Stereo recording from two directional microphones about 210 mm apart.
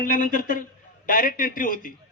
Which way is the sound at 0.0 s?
40° left (ahead or behind).